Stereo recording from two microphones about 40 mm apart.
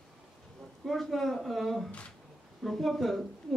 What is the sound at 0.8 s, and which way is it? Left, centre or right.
Speech, centre.